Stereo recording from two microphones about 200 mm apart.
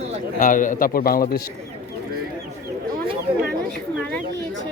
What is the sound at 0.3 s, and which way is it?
A man's voice, 40° left (ahead or behind).